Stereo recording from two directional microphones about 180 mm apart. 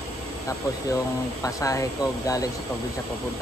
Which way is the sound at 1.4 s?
20° left (ahead or behind).